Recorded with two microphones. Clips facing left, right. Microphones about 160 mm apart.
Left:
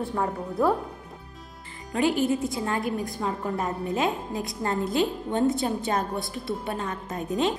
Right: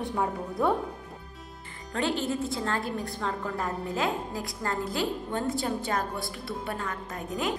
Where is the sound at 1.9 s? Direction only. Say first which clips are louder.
Left 5 dB; 10° left (ahead or behind).